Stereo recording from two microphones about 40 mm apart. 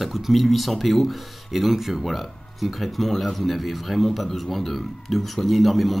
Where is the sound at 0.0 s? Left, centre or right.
Centre.